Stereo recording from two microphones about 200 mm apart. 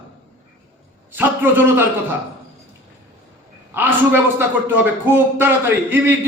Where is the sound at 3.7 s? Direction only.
10° right (ahead or behind).